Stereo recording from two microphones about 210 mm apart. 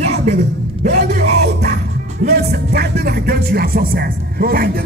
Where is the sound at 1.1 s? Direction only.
50° right (ahead or behind).